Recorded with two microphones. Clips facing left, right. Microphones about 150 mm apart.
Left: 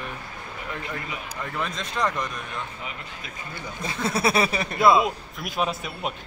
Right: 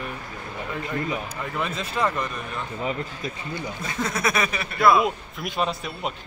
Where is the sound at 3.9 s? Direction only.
30° left (ahead or behind).